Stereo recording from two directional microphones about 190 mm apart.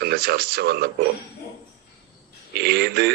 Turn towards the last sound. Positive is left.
turn(degrees=-55)  # may be behind; listen again after turning